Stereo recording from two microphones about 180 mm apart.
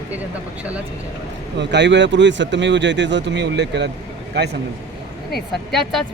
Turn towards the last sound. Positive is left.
turn(degrees=0)  # may be behind; listen again after turning